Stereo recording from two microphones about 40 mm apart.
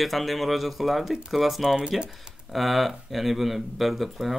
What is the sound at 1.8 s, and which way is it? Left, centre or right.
Speech, right.